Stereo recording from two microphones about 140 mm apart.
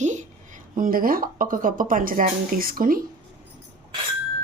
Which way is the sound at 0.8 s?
90° right.